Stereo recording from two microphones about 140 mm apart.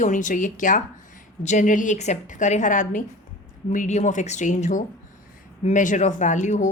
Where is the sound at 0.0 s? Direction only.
65° left (ahead or behind).